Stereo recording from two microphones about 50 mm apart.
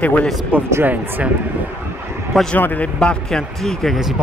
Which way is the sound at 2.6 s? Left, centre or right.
Left.